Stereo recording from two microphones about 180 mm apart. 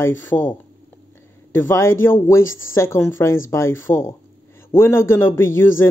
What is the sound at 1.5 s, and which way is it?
Speech, 15° left (ahead or behind).